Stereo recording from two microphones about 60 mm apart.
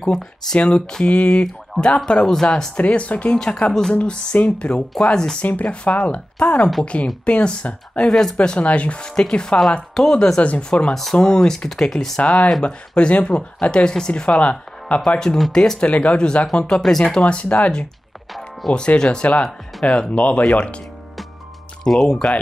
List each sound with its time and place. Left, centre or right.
0.0 s speech: centre
5.4 s speech: left
8.1 s speech: centre
8.4 s speech: left
12.2 s speech: left
15.0 s speech: centre
15.9 s speech: left
17.2 s speech: left
21.8 s speech: centre